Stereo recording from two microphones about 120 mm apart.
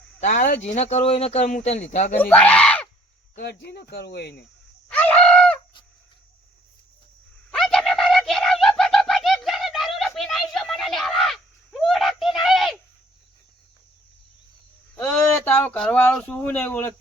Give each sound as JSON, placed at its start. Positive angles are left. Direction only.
{"t": 0.2, "sound": "speech", "side_deg": 90}
{"t": 1.6, "sound": "speech", "side_deg": 75}
{"t": 2.1, "sound": "speech", "side_deg": 10}
{"t": 4.9, "sound": "bird", "side_deg": 10}
{"t": 7.5, "sound": "a sound", "side_deg": 5}
{"t": 15.0, "sound": "a sound", "side_deg": 10}
{"t": 16.1, "sound": "a man's voice", "side_deg": 10}